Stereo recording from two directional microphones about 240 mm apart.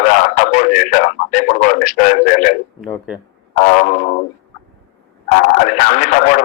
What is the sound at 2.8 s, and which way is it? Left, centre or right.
Speech, centre.